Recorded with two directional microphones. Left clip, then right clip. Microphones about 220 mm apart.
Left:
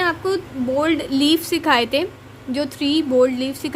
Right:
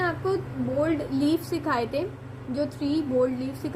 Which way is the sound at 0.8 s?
80° left.